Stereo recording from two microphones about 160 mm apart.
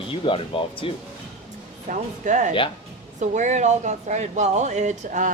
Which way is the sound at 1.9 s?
50° right (ahead or behind).